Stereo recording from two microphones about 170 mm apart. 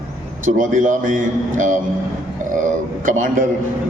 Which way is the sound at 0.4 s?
50° right (ahead or behind).